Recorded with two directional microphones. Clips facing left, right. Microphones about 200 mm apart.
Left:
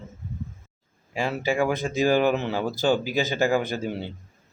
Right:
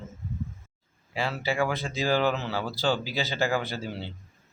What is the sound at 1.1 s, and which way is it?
Speech, 15° left (ahead or behind).